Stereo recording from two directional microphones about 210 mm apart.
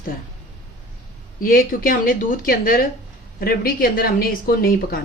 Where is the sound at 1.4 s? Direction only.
45° left (ahead or behind).